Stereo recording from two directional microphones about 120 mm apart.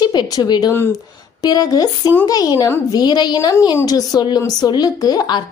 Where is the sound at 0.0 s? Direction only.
35° left (ahead or behind).